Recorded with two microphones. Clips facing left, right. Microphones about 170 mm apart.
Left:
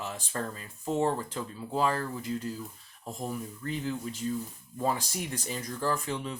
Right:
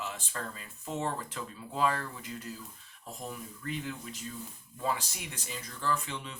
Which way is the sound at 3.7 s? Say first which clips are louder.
Left 4 dB; 35° left (ahead or behind).